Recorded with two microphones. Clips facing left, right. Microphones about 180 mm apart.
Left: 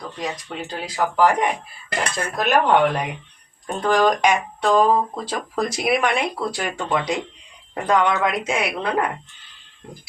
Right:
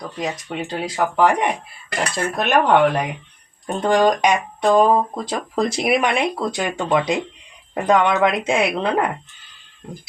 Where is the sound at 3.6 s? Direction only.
20° right (ahead or behind).